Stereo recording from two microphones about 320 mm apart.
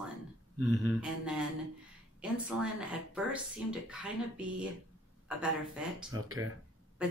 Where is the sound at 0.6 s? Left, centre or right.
Right.